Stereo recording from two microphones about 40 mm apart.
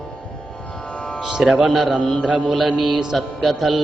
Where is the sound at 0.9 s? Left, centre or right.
Left.